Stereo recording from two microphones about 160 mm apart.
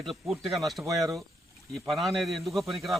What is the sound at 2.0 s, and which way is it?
Speech, centre (ahead or behind).